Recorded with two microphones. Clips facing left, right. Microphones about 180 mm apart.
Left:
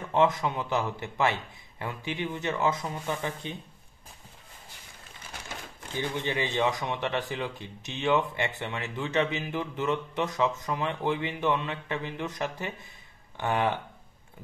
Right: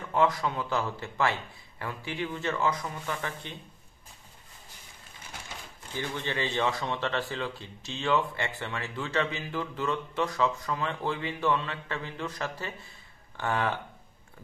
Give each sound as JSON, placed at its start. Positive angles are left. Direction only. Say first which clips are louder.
{"t": 0.1, "sound": "speech", "louder": "left 2 dB", "side_deg": 20}
{"t": 5.9, "sound": "speech", "louder": "left 2 dB", "side_deg": 15}